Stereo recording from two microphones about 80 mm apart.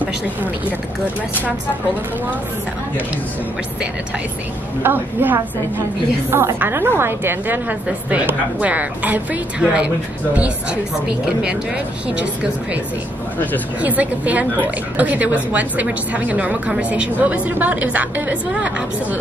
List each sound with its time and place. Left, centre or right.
4.8 s a woman's voice: right
13.7 s a woman's voice: centre